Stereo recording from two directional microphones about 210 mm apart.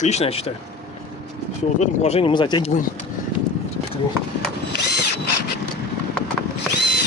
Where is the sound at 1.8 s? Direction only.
30° left (ahead or behind).